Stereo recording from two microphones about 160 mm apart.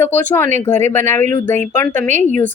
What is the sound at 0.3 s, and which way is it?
A woman's voice, 15° left (ahead or behind).